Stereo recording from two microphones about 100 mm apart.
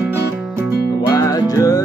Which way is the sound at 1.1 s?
35° left (ahead or behind).